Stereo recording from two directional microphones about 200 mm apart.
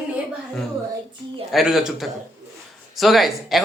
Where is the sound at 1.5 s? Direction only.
Centre (ahead or behind).